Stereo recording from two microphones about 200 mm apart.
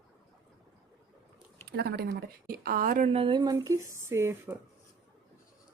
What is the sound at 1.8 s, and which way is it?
Speech, 55° right (ahead or behind).